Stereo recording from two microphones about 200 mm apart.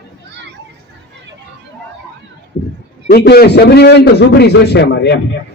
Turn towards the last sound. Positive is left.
turn(degrees=55)  # may be behind; listen again after turning